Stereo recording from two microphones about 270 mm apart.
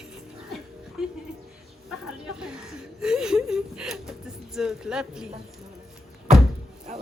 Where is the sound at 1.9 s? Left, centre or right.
Centre.